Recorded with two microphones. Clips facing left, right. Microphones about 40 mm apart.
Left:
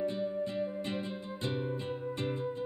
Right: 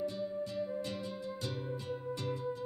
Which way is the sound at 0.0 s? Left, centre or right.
Left.